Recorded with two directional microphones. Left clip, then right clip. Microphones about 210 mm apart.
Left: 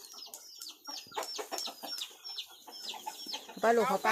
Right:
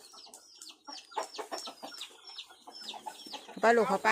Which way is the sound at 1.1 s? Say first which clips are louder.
Right 1 dB; 25° right (ahead or behind).